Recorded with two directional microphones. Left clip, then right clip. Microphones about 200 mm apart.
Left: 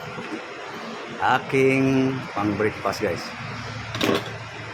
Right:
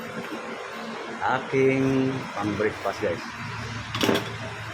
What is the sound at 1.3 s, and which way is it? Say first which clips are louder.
Speech: left 3 dB; 15° left (ahead or behind).